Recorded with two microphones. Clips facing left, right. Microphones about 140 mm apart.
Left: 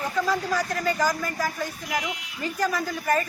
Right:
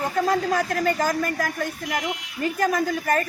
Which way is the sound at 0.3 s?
55° right (ahead or behind).